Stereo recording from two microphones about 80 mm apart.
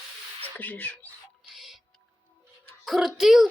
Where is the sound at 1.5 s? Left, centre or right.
Centre.